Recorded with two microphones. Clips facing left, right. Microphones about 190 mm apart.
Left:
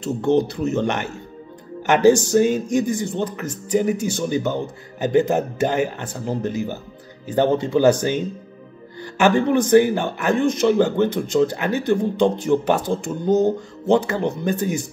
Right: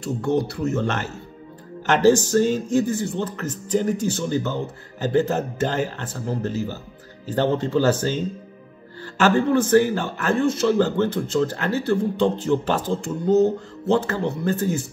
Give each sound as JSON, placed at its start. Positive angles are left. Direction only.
{"t": 0.0, "sound": "speech", "side_deg": 20}
{"t": 2.3, "sound": "speech", "side_deg": 15}